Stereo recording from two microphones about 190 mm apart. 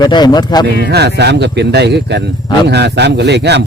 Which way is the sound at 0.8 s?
60° right (ahead or behind).